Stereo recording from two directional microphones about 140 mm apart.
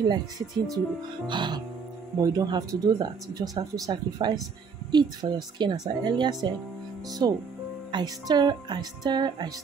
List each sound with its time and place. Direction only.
0.1 s speech: 30° right (ahead or behind)